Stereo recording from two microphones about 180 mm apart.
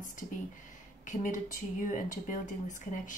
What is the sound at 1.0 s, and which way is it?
A woman's voice, 45° left (ahead or behind).